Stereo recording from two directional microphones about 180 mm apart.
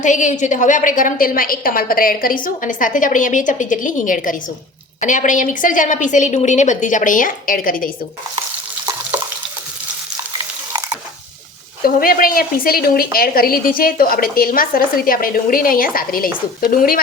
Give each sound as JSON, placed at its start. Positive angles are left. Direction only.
{"t": 0.0, "sound": "a woman's voice", "side_deg": 45}
{"t": 11.9, "sound": "a woman's voice", "side_deg": 55}